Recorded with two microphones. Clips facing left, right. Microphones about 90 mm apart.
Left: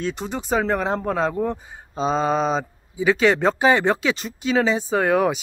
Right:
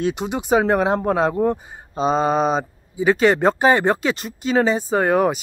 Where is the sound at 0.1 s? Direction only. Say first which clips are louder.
Right 5 dB; 10° right (ahead or behind).